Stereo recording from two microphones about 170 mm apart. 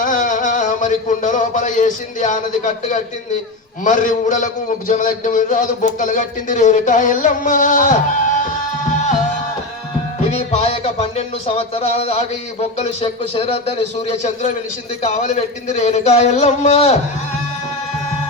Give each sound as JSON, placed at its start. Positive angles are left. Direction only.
{"t": 0.0, "sound": "a sound", "side_deg": 50}
{"t": 3.8, "sound": "a man's voice", "side_deg": 50}
{"t": 10.5, "sound": "music", "side_deg": 35}